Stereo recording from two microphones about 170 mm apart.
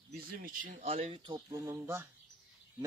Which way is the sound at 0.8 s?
35° right (ahead or behind).